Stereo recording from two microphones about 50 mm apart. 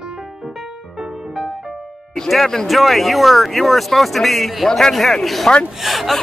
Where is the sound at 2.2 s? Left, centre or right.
Centre.